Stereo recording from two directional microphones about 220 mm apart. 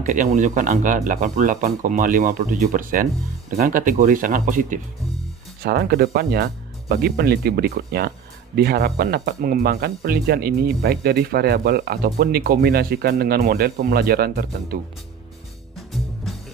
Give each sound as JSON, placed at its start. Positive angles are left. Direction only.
{"t": 0.0, "sound": "speech", "side_deg": -35}